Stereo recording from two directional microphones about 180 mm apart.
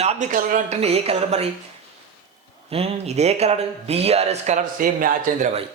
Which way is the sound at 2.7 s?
35° right (ahead or behind).